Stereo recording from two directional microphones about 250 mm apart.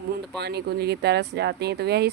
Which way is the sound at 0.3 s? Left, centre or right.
Right.